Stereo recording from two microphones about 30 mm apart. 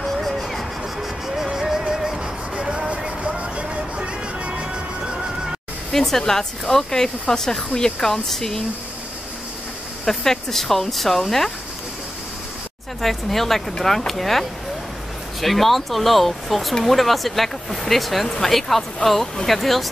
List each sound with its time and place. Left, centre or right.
0.0 s a sound: centre
1.2 s a sound: centre
1.5 s music: centre
2.5 s music: right
5.9 s speech: centre
10.0 s speech: centre
13.0 s speech: centre
15.4 s speech: centre